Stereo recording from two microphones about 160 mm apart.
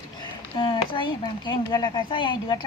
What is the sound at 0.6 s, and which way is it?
Speech, 30° left (ahead or behind).